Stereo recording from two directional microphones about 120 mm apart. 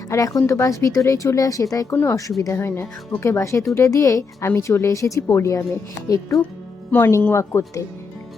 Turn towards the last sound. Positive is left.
turn(degrees=25)  # may be behind; listen again after turning